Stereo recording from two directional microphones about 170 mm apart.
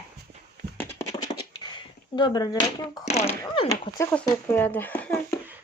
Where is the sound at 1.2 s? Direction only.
25° left (ahead or behind).